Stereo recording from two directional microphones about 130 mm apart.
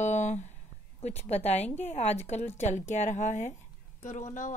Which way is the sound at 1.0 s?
55° left (ahead or behind).